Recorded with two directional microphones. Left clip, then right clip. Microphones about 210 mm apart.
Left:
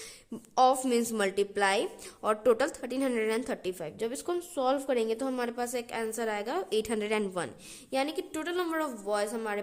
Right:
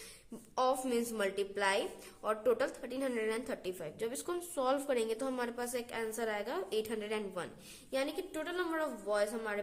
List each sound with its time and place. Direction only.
0.5 s a woman's voice: 40° left (ahead or behind)